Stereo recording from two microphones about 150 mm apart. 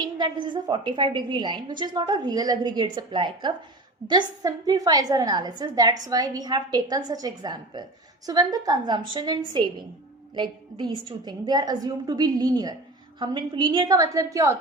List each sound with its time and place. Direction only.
0.0 s a woman's voice: 30° right (ahead or behind)